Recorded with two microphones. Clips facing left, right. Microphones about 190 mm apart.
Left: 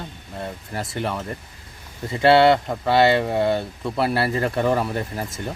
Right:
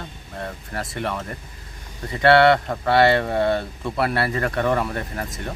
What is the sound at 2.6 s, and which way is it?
Speech, 5° left (ahead or behind).